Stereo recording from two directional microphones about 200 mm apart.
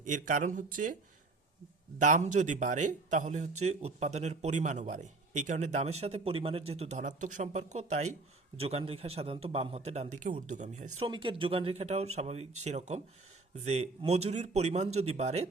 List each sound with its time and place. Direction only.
0.0 s a man's voice: 40° right (ahead or behind)
2.0 s a man's voice: 40° right (ahead or behind)
11.0 s a man's voice: 25° right (ahead or behind)